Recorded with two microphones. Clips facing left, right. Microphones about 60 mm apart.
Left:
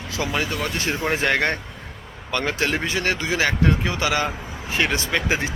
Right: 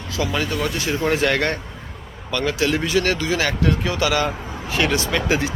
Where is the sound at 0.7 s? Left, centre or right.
Left.